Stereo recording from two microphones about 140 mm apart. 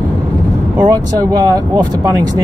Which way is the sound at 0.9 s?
25° right (ahead or behind).